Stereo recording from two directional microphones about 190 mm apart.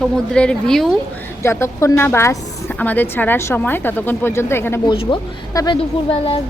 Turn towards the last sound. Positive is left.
turn(degrees=30)  # may be behind; listen again after turning